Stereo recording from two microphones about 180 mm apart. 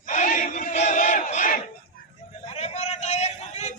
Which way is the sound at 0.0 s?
45° left (ahead or behind).